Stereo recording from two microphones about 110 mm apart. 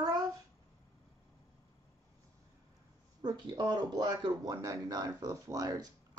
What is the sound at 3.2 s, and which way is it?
A child's voice, 40° right (ahead or behind).